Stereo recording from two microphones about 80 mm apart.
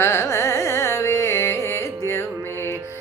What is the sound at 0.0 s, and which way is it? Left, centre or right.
Carnatic music, left.